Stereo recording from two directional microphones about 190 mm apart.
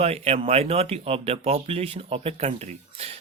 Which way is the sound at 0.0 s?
30° right (ahead or behind).